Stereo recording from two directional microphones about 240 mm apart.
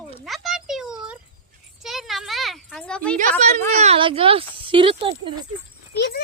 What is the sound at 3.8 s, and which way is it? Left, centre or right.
Speech, right.